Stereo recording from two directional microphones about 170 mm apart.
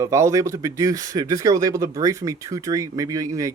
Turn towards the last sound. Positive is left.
turn(degrees=-20)  # may be behind; listen again after turning